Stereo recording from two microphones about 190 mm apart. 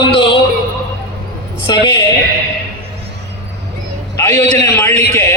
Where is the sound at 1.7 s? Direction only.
20° left (ahead or behind).